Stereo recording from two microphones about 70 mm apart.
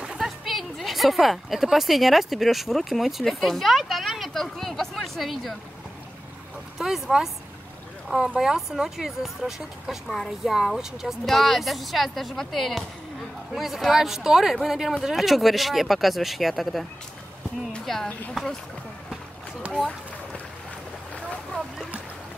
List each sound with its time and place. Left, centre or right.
0.2 s a woman's voice: centre
6.8 s speech: centre
8.4 s speech: centre
19.6 s run: centre